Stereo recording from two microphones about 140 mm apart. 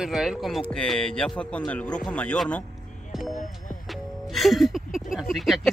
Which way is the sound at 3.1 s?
5° right (ahead or behind).